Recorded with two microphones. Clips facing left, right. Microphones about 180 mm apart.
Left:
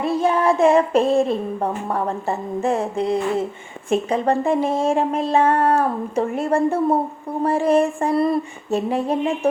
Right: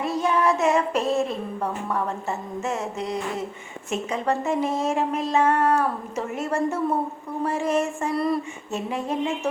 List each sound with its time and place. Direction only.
0.0 s child singing: 30° left (ahead or behind)
3.8 s speech: 30° left (ahead or behind)